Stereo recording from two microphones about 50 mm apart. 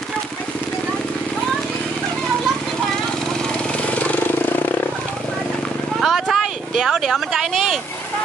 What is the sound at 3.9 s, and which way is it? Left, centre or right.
Vehicle, left.